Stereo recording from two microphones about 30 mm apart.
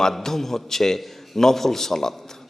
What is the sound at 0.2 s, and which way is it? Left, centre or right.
A man's voice, centre.